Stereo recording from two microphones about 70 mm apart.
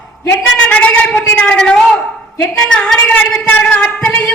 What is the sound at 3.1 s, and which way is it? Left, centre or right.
Speech, left.